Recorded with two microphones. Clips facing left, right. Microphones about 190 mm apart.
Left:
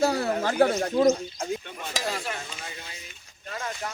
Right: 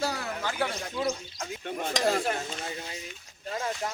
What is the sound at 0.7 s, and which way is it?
Speech, 45° left (ahead or behind).